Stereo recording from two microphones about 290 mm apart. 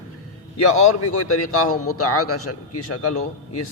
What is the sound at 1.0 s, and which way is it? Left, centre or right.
A man's voice, left.